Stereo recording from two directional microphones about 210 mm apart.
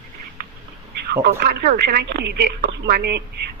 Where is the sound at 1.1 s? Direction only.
45° right (ahead or behind).